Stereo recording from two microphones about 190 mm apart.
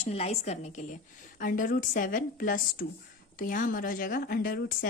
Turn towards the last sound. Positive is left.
turn(degrees=50)  # may be behind; listen again after turning